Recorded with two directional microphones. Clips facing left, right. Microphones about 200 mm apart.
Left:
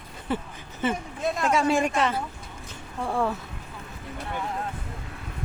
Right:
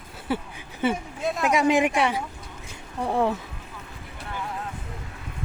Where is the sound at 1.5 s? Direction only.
15° right (ahead or behind).